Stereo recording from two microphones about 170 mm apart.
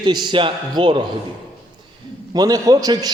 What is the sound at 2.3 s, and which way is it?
Speech, 20° right (ahead or behind).